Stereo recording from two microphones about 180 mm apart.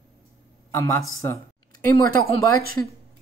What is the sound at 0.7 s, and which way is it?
Speech, 15° left (ahead or behind).